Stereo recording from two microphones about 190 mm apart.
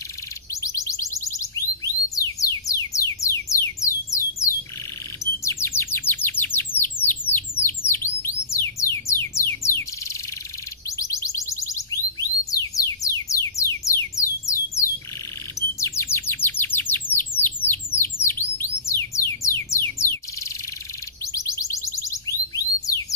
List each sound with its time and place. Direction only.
0.6 s music: 15° left (ahead or behind)
3.8 s a sound: 15° left (ahead or behind)
5.2 s chirp: 15° left (ahead or behind)
8.9 s music: 15° left (ahead or behind)
11.0 s music: 15° left (ahead or behind)
15.8 s bird: 15° left (ahead or behind)
18.9 s music: 15° left (ahead or behind)
21.3 s music: 15° left (ahead or behind)